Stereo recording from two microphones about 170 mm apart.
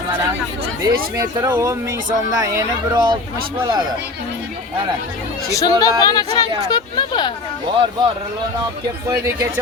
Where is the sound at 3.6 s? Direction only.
25° right (ahead or behind).